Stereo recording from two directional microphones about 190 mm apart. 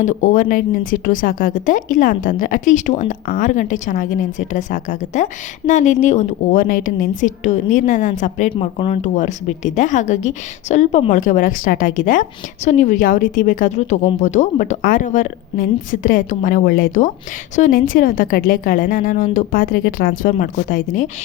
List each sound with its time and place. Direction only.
0.0 s a woman's voice: 40° left (ahead or behind)